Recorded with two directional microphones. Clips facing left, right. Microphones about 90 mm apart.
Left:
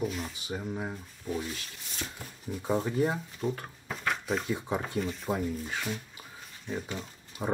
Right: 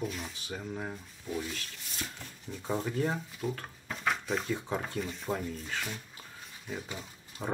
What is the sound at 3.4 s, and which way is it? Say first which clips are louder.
Speech: left 3 dB; centre (ahead or behind).